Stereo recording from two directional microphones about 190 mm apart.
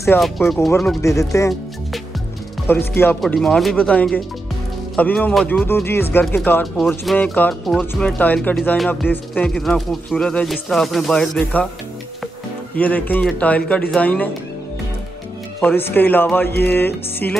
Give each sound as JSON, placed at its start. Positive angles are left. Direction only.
{"t": 0.2, "sound": "speech", "side_deg": 0}
{"t": 1.0, "sound": "speech", "side_deg": 15}
{"t": 2.6, "sound": "speech", "side_deg": 10}
{"t": 12.7, "sound": "speech", "side_deg": 10}
{"t": 15.6, "sound": "speech", "side_deg": 10}